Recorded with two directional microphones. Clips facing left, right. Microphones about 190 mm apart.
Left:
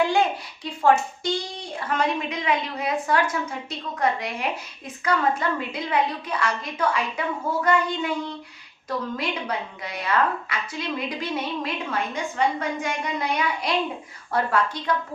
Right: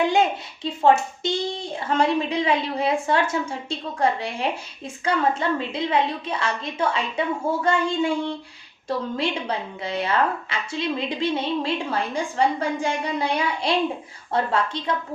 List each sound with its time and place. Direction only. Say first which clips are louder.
0.1 s a child's voice: right 2 dB; 25° right (ahead or behind)